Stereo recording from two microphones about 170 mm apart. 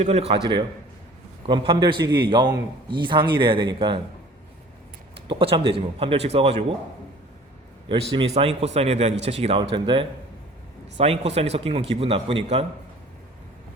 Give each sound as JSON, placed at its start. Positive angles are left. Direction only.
{"t": 0.0, "sound": "a man's voice", "side_deg": -35}
{"t": 5.3, "sound": "speech", "side_deg": -30}
{"t": 8.1, "sound": "speech", "side_deg": -30}